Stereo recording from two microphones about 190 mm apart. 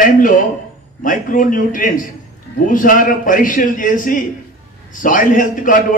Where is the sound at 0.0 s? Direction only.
45° left (ahead or behind).